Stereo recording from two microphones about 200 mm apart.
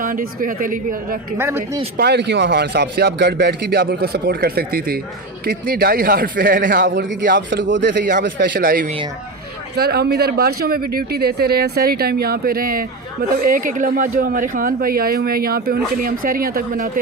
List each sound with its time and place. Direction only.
0.0 s speech: 45° right (ahead or behind)
1.4 s speech: 15° right (ahead or behind)
2.0 s speech: 55° right (ahead or behind)
7.5 s speech: 65° right (ahead or behind); by 17.0 s 45° right (ahead or behind)